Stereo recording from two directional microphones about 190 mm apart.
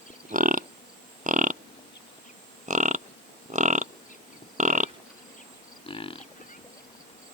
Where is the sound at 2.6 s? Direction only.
40° right (ahead or behind).